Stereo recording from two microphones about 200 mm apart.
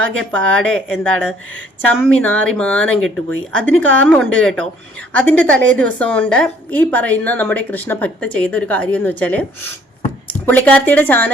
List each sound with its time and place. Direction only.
0.0 s a woman's voice: 5° left (ahead or behind)